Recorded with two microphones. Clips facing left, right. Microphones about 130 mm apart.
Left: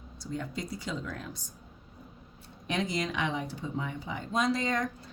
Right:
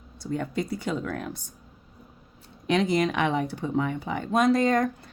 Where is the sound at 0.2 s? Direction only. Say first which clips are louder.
Right 7 dB; 60° right (ahead or behind).